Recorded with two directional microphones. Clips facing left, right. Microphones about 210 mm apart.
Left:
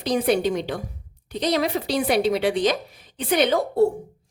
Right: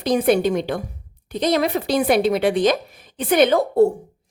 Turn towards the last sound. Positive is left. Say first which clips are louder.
# right 4 dB
turn(degrees=-50)  # may be behind; listen again after turning